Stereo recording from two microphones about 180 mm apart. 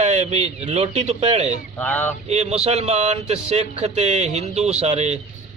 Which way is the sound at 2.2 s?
40° right (ahead or behind).